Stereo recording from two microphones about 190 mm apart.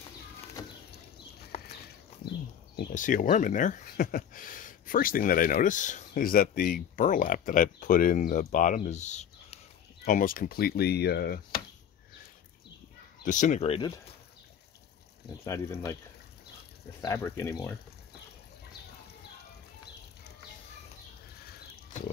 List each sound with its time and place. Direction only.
0.6 s a sound: 20° left (ahead or behind)
1.5 s walk: 35° left (ahead or behind)
2.2 s horse: 60° left (ahead or behind)
2.9 s speech: 45° left (ahead or behind)
10.0 s speech: 50° left (ahead or behind)
13.2 s speech: 40° left (ahead or behind)
15.4 s speech: 15° left (ahead or behind)
17.0 s speech: 15° left (ahead or behind)